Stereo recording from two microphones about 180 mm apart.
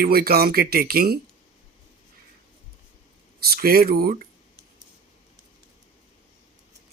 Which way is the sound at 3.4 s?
55° right (ahead or behind).